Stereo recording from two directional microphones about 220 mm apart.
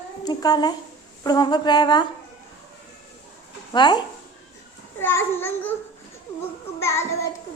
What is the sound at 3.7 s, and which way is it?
Speech, 20° left (ahead or behind).